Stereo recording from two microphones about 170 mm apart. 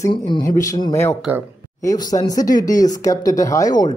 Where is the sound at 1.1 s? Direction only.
5° right (ahead or behind).